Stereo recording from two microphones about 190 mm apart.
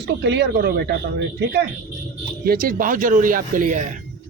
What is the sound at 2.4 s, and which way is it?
Speech, 45° right (ahead or behind).